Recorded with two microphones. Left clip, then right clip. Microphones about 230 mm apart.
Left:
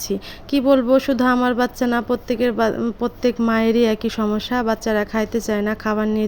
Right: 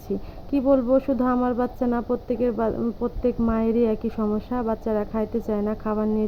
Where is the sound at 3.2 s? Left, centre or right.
Left.